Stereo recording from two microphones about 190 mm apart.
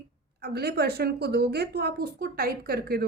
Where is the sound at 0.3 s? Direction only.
55° right (ahead or behind).